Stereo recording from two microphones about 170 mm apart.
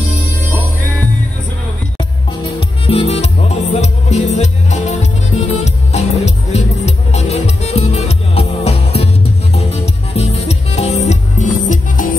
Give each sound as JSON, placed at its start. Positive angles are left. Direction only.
{"t": 2.9, "sound": "music", "side_deg": 35}